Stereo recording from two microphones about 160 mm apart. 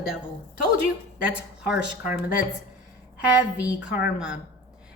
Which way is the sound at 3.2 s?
10° right (ahead or behind).